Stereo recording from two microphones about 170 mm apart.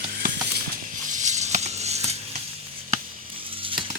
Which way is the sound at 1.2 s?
45° right (ahead or behind).